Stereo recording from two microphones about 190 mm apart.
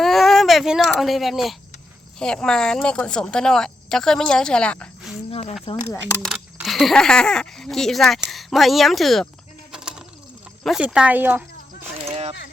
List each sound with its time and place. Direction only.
0.0 s baby cry: centre (ahead or behind)
2.1 s speech: 5° left (ahead or behind)
5.3 s speech: 30° left (ahead or behind)
6.2 s speech: centre (ahead or behind)
9.7 s bird: 5° right (ahead or behind)
10.6 s speech: centre (ahead or behind)
12.0 s a sound: 30° right (ahead or behind)